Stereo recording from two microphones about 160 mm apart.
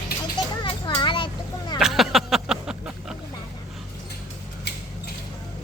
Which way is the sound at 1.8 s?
Centre (ahead or behind).